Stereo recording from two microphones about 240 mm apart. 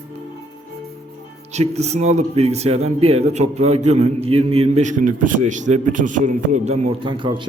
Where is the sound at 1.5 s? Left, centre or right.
Right.